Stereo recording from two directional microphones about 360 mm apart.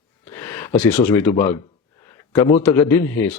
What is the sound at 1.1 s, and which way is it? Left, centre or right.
Speech, centre.